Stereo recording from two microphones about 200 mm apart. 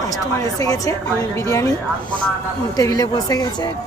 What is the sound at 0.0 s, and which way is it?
Speech, 15° left (ahead or behind).